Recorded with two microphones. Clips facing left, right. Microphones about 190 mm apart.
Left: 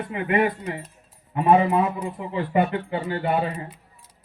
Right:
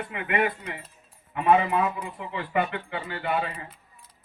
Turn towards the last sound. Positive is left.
turn(degrees=40)  # may be behind; listen again after turning